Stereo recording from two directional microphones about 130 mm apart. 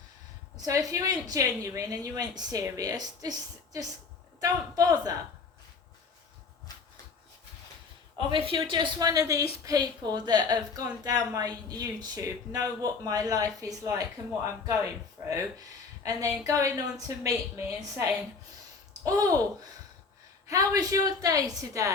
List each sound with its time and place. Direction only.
0.5 s a woman's voice: 25° right (ahead or behind)
8.3 s a woman's voice: 40° right (ahead or behind)
20.5 s a woman's voice: 25° right (ahead or behind)